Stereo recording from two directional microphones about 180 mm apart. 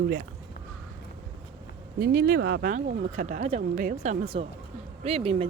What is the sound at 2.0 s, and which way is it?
Speech, 60° right (ahead or behind).